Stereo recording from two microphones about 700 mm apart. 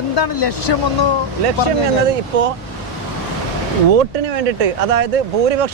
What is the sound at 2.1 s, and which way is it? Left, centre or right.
Speech, right.